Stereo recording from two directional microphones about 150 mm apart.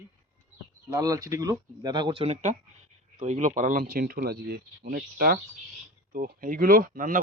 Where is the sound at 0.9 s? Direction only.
20° right (ahead or behind).